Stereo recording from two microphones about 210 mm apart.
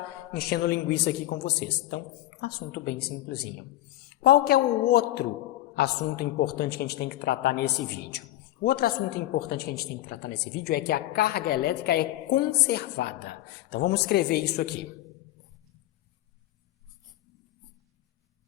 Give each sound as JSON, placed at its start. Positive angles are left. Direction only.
{"t": 0.3, "sound": "a woman's voice", "side_deg": 50}